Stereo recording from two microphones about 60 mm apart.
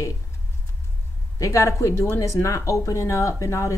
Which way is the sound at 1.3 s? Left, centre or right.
Left.